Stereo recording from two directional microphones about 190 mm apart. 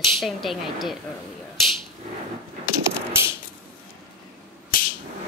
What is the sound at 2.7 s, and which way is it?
Mechanisms, 15° right (ahead or behind).